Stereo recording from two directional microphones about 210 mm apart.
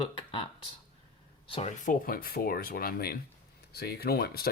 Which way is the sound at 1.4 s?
30° left (ahead or behind).